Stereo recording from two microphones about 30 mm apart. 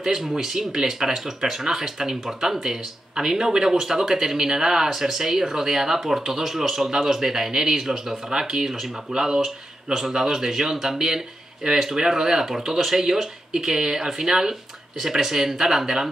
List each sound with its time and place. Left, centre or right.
0.3 s speech: centre
8.3 s speech: right